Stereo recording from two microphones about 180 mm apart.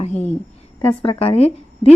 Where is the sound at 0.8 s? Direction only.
30° left (ahead or behind).